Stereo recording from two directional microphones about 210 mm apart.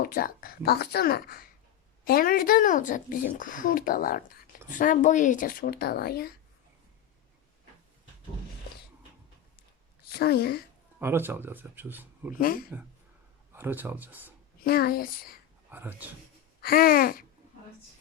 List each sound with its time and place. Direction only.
0.0 s speech: 45° left (ahead or behind)
10.1 s speech: 50° left (ahead or behind)
11.0 s speech: 10° right (ahead or behind)
12.4 s speech: 45° left (ahead or behind)
13.5 s speech: 10° right (ahead or behind)
14.6 s speech: 45° left (ahead or behind)
15.7 s speech: 10° right (ahead or behind)
16.6 s speech: 45° left (ahead or behind)